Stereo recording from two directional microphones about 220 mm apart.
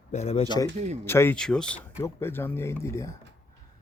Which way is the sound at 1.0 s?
10° left (ahead or behind).